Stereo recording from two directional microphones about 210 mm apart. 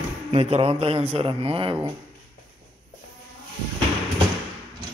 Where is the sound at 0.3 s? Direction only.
30° right (ahead or behind).